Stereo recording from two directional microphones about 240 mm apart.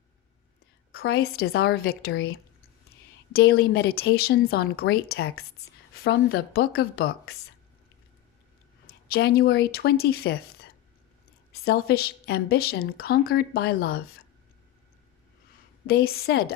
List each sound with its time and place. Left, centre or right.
0.9 s a woman's voice: left
8.9 s a woman's voice: left
11.5 s a woman's voice: left
15.9 s a woman's voice: left